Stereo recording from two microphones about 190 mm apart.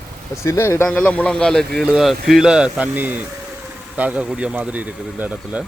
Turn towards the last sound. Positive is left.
turn(degrees=-5)  # may be behind; listen again after turning